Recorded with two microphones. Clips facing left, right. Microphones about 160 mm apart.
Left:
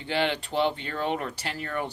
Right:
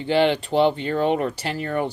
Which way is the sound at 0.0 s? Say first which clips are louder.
Right 8 dB; 25° right (ahead or behind).